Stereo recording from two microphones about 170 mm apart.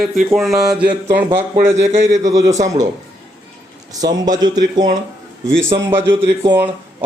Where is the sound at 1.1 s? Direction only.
15° right (ahead or behind).